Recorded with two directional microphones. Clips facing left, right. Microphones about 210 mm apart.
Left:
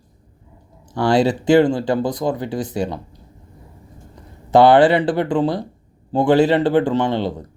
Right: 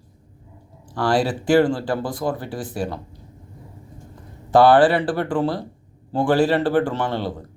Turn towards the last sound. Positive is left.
turn(degrees=20)  # may be behind; listen again after turning